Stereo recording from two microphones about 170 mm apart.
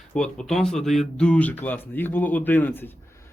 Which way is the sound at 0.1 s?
5° left (ahead or behind).